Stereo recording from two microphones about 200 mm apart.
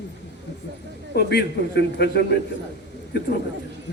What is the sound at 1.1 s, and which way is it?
A man's voice, 55° left (ahead or behind).